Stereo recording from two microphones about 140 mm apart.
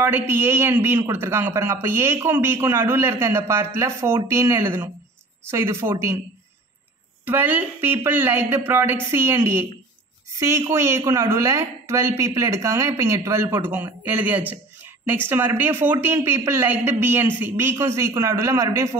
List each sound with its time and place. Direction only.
0.0 s a man's voice: 15° right (ahead or behind)
7.2 s a man's voice: 15° right (ahead or behind)